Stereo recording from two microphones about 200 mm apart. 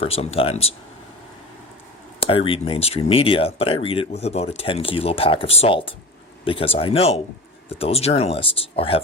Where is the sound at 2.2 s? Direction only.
25° left (ahead or behind).